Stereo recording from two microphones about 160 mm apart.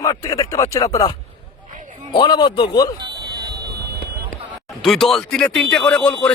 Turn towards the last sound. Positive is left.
turn(degrees=10)  # may be behind; listen again after turning